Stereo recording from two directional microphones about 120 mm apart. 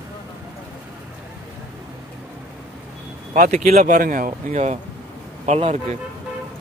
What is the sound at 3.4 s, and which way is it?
Speech, 75° right (ahead or behind).